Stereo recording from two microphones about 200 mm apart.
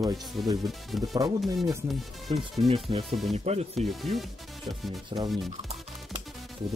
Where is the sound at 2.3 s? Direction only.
30° right (ahead or behind).